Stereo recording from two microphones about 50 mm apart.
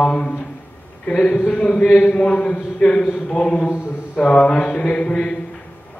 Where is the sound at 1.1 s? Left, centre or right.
Left.